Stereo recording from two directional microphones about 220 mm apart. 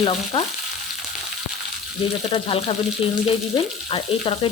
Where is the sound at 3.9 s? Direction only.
25° left (ahead or behind).